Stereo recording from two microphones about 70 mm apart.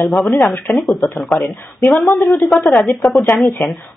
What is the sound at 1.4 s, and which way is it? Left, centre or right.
Speech, left.